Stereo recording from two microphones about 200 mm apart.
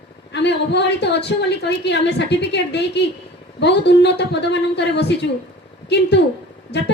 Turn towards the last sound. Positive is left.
turn(degrees=60)  # may be behind; listen again after turning